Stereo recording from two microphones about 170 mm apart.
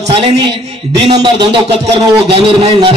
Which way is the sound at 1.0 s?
30° right (ahead or behind).